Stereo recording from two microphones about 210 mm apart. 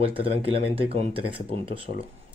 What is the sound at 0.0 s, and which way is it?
Speech, 25° right (ahead or behind).